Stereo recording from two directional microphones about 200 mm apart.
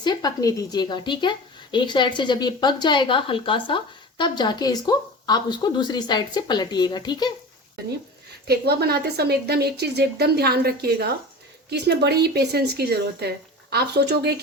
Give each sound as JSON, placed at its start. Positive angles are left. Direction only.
{"t": 0.0, "sound": "speech", "side_deg": 20}
{"t": 8.4, "sound": "a woman's voice", "side_deg": -55}